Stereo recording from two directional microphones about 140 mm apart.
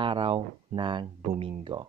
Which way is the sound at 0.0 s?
40° right (ahead or behind).